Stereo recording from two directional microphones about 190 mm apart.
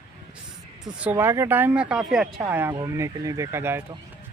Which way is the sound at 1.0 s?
10° right (ahead or behind).